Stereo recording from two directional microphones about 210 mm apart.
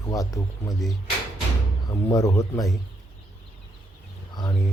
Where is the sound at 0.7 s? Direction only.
Centre (ahead or behind).